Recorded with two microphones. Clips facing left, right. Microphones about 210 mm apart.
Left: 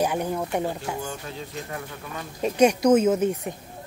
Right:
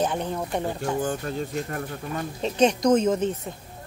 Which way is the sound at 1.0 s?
50° right (ahead or behind).